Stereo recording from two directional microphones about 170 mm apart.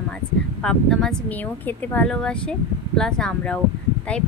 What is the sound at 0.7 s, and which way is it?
Speech, 5° left (ahead or behind).